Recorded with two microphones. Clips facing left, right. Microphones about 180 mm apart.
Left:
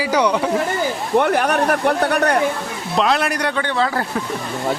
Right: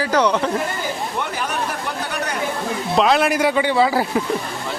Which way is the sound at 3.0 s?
Centre (ahead or behind).